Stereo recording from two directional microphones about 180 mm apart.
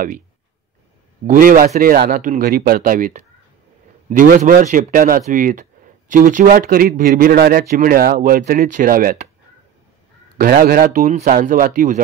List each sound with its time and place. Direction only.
1.2 s speech: 50° right (ahead or behind)
10.3 s speech: 55° right (ahead or behind)